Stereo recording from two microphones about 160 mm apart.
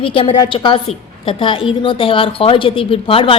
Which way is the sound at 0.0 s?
35° left (ahead or behind).